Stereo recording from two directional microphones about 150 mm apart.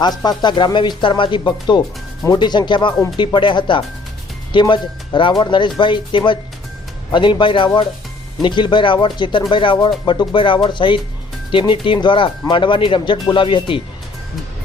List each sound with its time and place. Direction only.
0.0 s speech: 25° left (ahead or behind)